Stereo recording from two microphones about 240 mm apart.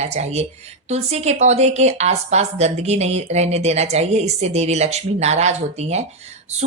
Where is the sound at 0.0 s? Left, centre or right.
Right.